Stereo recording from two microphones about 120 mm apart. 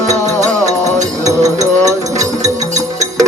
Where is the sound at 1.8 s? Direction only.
30° right (ahead or behind).